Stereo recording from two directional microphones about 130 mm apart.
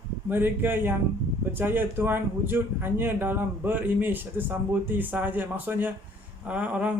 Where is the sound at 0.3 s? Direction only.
15° right (ahead or behind).